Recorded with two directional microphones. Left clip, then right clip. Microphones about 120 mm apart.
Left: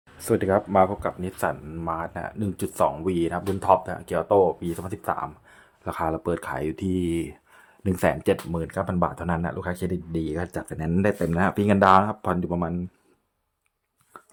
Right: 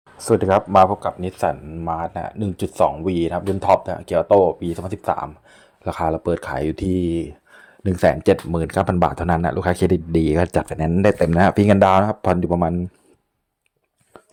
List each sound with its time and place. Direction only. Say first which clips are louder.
0.2 s speech: right 6 dB; 15° right (ahead or behind)
1.6 s speech: right 4 dB; 15° right (ahead or behind)
1.9 s speech: right 5 dB; 30° right (ahead or behind)
7.0 s speech: right 4 dB; 15° right (ahead or behind)
7.5 s a sound: right 5 dB; 30° right (ahead or behind)
8.1 s speech: right 7 dB; 40° right (ahead or behind)
8.5 s speech: right 7 dB; 60° right (ahead or behind)
10.7 s speech: right 7 dB; 45° right (ahead or behind)